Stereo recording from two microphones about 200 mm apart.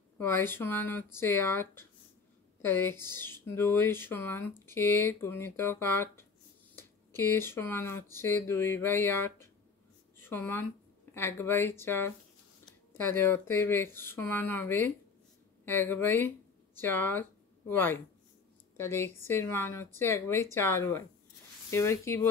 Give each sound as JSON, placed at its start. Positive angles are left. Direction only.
{"t": 0.2, "sound": "speech", "side_deg": 10}